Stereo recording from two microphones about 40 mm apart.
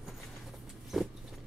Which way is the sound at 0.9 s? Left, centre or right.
Centre.